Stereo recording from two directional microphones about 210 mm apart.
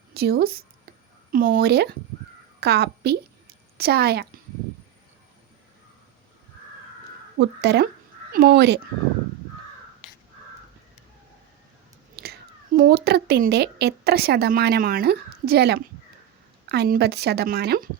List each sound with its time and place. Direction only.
0.1 s a woman's voice: 50° right (ahead or behind)
7.3 s a woman's voice: 55° right (ahead or behind)
12.1 s a woman's voice: 50° right (ahead or behind)